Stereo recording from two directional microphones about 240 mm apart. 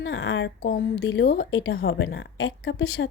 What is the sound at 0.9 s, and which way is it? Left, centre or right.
Speech, left.